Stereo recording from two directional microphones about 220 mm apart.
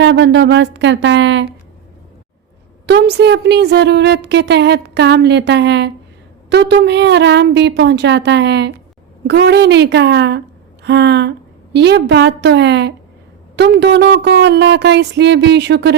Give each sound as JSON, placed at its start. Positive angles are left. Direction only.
{"t": 0.0, "sound": "a woman's voice", "side_deg": -55}
{"t": 2.8, "sound": "a woman's voice", "side_deg": -50}